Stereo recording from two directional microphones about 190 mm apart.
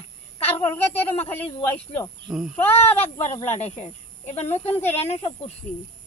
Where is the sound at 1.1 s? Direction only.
10° left (ahead or behind).